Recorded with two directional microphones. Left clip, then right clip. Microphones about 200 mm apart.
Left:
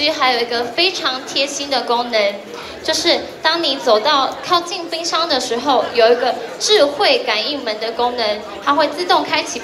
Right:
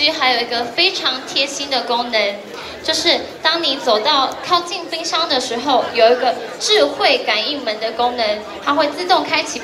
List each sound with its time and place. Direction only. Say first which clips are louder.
0.0 s a woman's voice: even; 30° left (ahead or behind)